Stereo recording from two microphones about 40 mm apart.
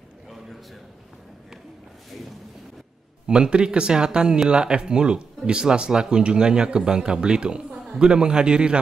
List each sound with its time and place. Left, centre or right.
3.3 s speech: right